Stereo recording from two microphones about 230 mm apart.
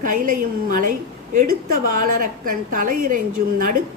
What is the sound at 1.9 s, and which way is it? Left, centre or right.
A woman's voice, right.